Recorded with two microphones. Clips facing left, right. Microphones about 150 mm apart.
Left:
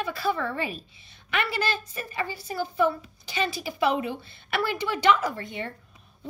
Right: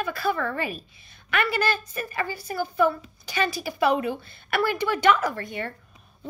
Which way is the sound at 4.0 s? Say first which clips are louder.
Right 3 dB; 50° right (ahead or behind).